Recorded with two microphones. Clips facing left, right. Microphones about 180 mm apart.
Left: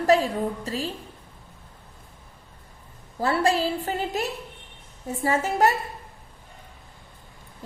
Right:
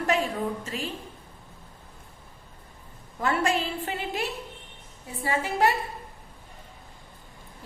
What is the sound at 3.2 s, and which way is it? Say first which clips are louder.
A woman's voice: left 3 dB; 35° left (ahead or behind).